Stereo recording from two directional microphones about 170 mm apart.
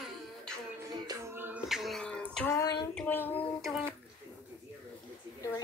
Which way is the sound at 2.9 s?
10° left (ahead or behind).